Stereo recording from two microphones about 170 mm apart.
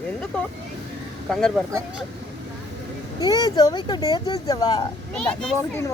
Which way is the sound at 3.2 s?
20° left (ahead or behind).